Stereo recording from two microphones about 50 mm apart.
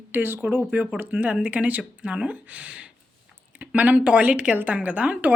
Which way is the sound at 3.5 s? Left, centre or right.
Right.